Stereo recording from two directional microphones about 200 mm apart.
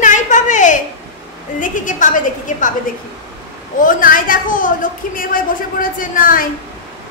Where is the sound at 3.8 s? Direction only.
45° left (ahead or behind).